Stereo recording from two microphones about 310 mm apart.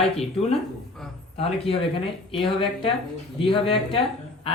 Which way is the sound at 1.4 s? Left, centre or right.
Centre.